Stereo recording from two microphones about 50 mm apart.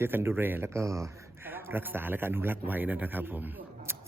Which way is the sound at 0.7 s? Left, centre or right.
Right.